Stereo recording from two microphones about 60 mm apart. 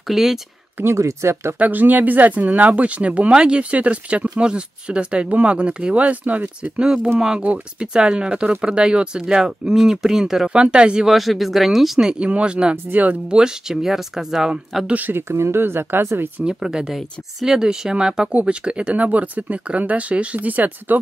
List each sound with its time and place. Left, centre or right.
0.1 s speech: centre
0.9 s speech: right
1.6 s speech: right
6.8 s speech: centre
10.6 s speech: centre
11.1 s speech: centre
12.9 s speech: right
13.3 s speech: centre
14.9 s speech: right
15.1 s speech: right
16.5 s speech: centre; by 21.0 s right